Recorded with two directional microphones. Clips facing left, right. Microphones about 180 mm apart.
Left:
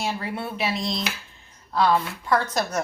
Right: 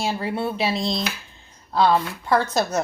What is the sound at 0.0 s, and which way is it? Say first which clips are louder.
A woman's voice: right 4 dB; 30° right (ahead or behind).